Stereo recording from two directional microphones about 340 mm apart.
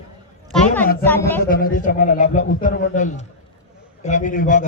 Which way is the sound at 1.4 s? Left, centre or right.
Left.